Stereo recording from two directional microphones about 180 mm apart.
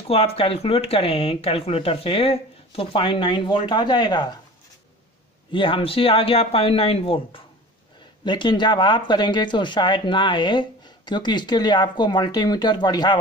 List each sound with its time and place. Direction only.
0.1 s speech: 30° left (ahead or behind)
5.5 s speech: 30° left (ahead or behind)